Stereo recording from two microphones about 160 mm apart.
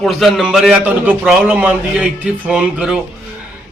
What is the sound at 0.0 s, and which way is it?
A man's voice, centre (ahead or behind).